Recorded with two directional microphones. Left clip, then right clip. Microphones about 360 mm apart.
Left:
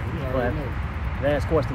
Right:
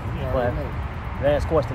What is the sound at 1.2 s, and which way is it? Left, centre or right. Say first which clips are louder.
Speech: right 2 dB; centre.